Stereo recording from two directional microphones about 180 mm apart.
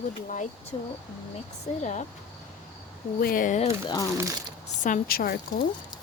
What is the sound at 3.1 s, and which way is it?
Speech, 55° left (ahead or behind).